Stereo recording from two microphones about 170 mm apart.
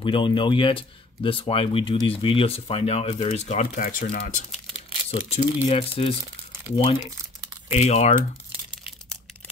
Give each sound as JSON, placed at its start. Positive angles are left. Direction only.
{"t": 0.0, "sound": "speech", "side_deg": 30}
{"t": 5.3, "sound": "speech", "side_deg": 35}
{"t": 7.7, "sound": "speech", "side_deg": 40}